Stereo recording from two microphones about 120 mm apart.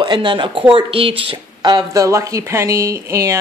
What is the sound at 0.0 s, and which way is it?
Speech, 40° right (ahead or behind).